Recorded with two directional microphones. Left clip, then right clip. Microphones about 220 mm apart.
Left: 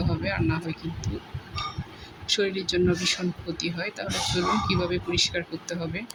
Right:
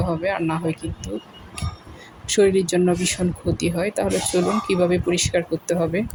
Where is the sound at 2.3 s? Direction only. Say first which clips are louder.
Right 8 dB; 20° right (ahead or behind).